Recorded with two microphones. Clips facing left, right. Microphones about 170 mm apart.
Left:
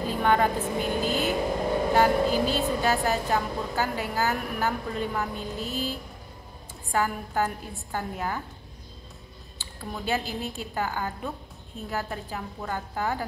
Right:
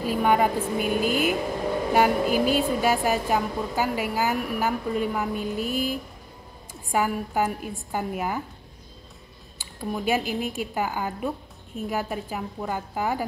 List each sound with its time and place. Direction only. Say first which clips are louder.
0.0 s a woman's voice: right 2 dB; 10° right (ahead or behind)
9.8 s a woman's voice: right 4 dB; 15° right (ahead or behind)